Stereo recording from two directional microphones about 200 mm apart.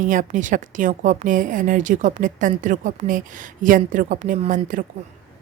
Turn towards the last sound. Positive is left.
turn(degrees=-40)  # may be behind; listen again after turning